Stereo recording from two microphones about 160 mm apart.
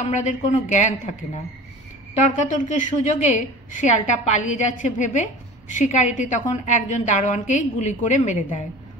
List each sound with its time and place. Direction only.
0.0 s a woman's voice: 50° left (ahead or behind)
2.2 s a woman's voice: 50° left (ahead or behind)